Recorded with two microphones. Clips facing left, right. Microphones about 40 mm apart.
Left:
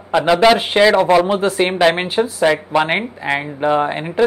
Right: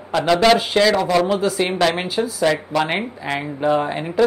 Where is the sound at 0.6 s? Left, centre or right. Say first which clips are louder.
Left 4 dB; left.